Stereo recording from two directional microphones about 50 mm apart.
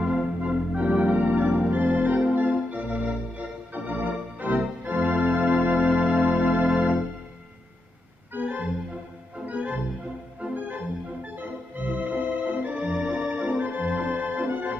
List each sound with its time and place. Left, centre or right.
0.0 s organ: right
8.3 s organ: right